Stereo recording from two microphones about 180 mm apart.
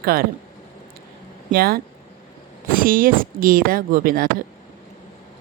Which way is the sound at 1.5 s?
55° right (ahead or behind).